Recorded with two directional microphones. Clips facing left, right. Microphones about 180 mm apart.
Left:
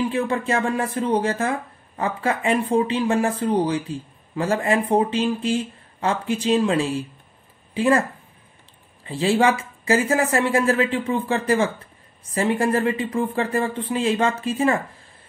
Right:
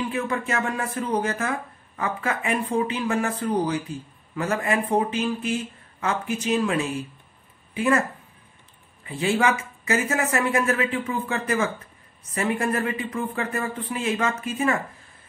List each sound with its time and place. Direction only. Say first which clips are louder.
0.1 s a woman's voice: left 4 dB; 30° left (ahead or behind)
9.0 s speech: left 4 dB; 30° left (ahead or behind)